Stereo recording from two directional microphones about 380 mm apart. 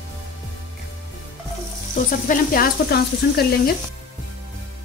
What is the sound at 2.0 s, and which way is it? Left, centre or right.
Frying, left.